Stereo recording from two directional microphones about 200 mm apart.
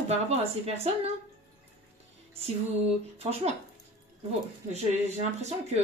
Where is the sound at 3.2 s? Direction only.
30° right (ahead or behind).